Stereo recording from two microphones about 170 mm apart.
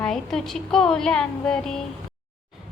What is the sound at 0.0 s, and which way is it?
A woman's voice, 5° left (ahead or behind).